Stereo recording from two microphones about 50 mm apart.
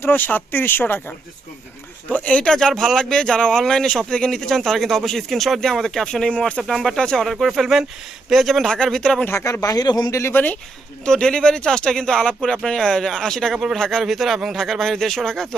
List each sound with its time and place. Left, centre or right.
0.0 s speech: left
2.0 s speech: left
2.4 s speech: centre
8.7 s speech: centre
9.3 s speech: left
10.3 s speech: left
11.0 s speech: centre
13.5 s speech: centre
13.7 s speech: centre